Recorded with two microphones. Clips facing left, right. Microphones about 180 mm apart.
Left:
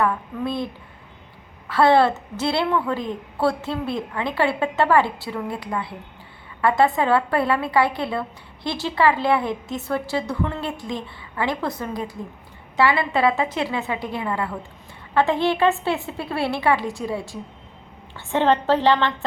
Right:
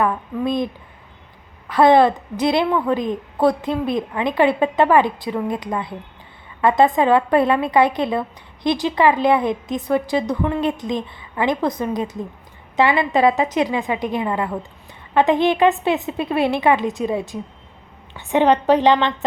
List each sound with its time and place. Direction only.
0.0 s a woman's voice: 15° right (ahead or behind)